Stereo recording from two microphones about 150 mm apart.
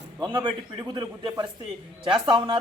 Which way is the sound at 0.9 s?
30° right (ahead or behind).